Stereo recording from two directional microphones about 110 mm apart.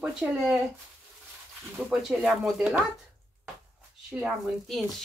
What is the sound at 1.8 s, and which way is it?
Speech, 15° right (ahead or behind).